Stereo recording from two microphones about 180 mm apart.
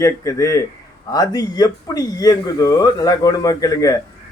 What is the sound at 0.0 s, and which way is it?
A man's voice, 15° left (ahead or behind).